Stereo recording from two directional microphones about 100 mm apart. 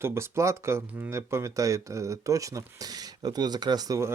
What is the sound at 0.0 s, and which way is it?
Speech, 25° right (ahead or behind).